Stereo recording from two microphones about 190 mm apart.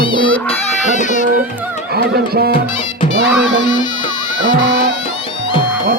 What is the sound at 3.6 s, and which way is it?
Music, 20° left (ahead or behind).